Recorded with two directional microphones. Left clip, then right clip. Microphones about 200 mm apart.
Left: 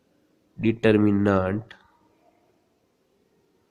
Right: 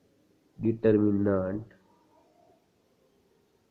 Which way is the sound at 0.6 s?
45° left (ahead or behind).